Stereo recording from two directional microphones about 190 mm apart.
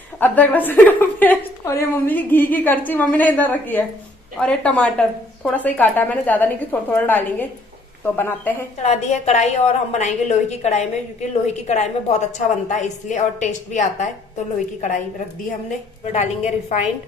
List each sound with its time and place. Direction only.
0.2 s a woman's voice: 10° left (ahead or behind)
8.8 s a woman's voice: 35° left (ahead or behind)
16.1 s a woman's voice: 40° left (ahead or behind)